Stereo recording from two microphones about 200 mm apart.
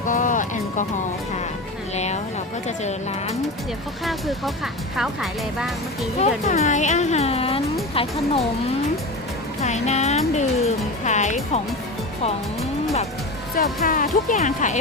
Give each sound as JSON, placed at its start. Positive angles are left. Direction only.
{"t": 0.0, "sound": "music", "side_deg": 40}
{"t": 2.0, "sound": "a sound", "side_deg": 35}
{"t": 2.6, "sound": "speech", "side_deg": 35}
{"t": 4.0, "sound": "speech", "side_deg": 0}
{"t": 6.1, "sound": "speech", "side_deg": 35}
{"t": 9.6, "sound": "speech", "side_deg": 35}
{"t": 13.8, "sound": "speech", "side_deg": 40}